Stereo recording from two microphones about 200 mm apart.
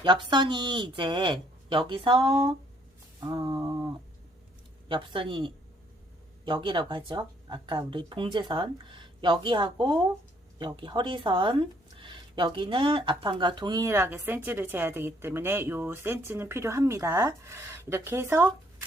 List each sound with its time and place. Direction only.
0.0 s speech: 25° right (ahead or behind)